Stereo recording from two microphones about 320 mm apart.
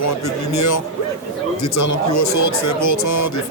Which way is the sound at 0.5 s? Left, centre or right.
Left.